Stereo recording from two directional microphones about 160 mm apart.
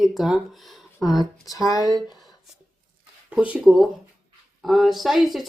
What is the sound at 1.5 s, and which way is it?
Speech, 25° left (ahead or behind).